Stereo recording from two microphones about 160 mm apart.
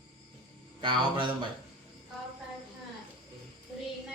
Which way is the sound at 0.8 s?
30° right (ahead or behind).